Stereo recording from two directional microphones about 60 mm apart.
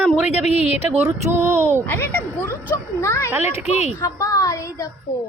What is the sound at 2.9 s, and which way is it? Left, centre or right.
Speech, left.